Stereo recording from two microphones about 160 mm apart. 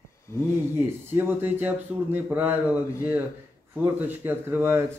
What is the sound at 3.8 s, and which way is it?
Speech, 15° right (ahead or behind).